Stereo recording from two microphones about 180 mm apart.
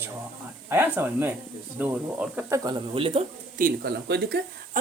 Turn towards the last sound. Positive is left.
turn(degrees=-45)  # may be behind; listen again after turning